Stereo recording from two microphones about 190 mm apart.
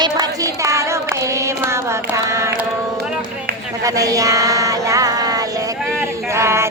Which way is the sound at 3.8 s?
20° right (ahead or behind).